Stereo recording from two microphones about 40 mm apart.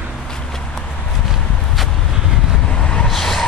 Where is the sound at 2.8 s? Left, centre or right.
Left.